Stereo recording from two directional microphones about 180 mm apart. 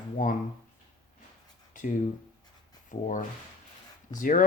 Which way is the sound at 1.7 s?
45° left (ahead or behind).